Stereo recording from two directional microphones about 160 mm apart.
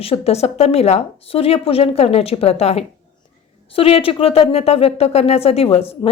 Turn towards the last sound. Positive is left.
turn(degrees=40)  # may be behind; listen again after turning